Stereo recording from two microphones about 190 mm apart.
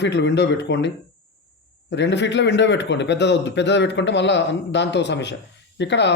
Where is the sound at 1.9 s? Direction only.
65° left (ahead or behind).